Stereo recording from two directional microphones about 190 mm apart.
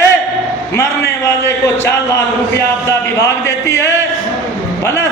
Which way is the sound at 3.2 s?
15° left (ahead or behind).